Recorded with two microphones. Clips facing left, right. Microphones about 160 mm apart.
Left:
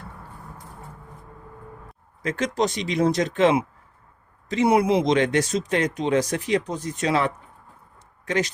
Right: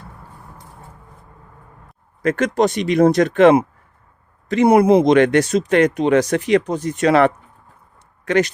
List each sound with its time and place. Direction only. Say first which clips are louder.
2.2 s speech: right 7 dB; 60° right (ahead or behind)